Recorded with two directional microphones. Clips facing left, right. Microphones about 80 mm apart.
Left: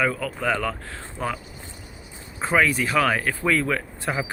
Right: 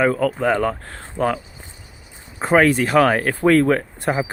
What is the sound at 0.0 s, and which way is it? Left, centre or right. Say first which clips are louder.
Speech: right 6 dB; right.